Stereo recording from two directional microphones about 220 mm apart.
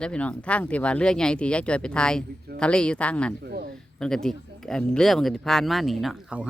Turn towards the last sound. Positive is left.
turn(degrees=-5)  # may be behind; listen again after turning